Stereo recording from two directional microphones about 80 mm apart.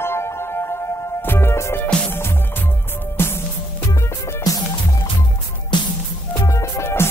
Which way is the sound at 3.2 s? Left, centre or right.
Left.